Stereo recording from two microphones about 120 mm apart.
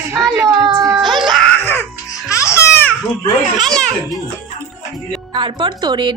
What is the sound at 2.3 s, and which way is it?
Music, 25° left (ahead or behind).